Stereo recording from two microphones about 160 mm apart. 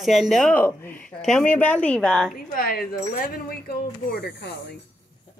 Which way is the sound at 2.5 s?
65° left (ahead or behind).